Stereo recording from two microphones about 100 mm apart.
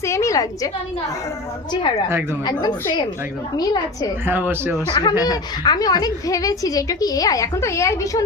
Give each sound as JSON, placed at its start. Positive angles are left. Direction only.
{"t": 0.0, "sound": "a woman's voice", "side_deg": 30}
{"t": 2.5, "sound": "a woman's voice", "side_deg": 45}
{"t": 4.3, "sound": "speech", "side_deg": -20}
{"t": 4.9, "sound": "a woman's voice", "side_deg": 40}